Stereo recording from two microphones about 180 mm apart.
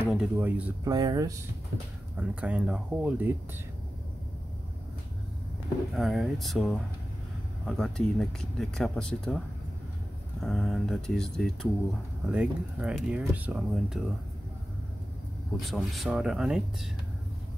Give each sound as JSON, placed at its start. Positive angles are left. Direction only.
{"t": 0.1, "sound": "speech", "side_deg": -5}
{"t": 0.9, "sound": "speech", "side_deg": -20}
{"t": 2.1, "sound": "speech", "side_deg": -5}
{"t": 5.9, "sound": "speech", "side_deg": 0}
{"t": 10.4, "sound": "speech", "side_deg": 0}
{"t": 15.6, "sound": "speech", "side_deg": 0}